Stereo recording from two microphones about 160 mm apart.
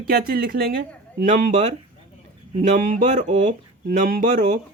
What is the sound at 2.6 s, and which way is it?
Speech, 50° right (ahead or behind).